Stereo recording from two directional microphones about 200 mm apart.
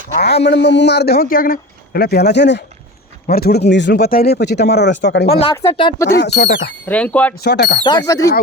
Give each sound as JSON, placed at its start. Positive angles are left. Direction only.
{"t": 0.1, "sound": "speech", "side_deg": 50}
{"t": 5.3, "sound": "speech", "side_deg": 30}
{"t": 6.1, "sound": "speech", "side_deg": 55}
{"t": 6.8, "sound": "speech", "side_deg": 5}
{"t": 7.4, "sound": "speech", "side_deg": 55}
{"t": 7.9, "sound": "speech", "side_deg": 20}